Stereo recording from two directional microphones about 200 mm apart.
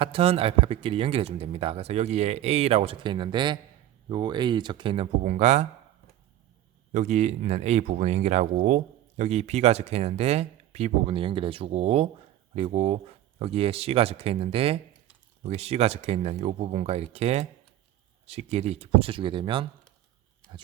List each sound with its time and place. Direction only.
0.0 s speech: 30° right (ahead or behind)
6.9 s speech: 35° right (ahead or behind)